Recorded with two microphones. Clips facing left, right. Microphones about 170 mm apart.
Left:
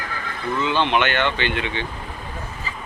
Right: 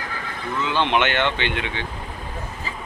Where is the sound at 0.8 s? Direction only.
20° right (ahead or behind).